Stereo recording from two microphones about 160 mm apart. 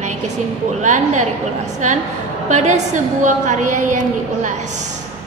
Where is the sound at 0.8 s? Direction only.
50° right (ahead or behind).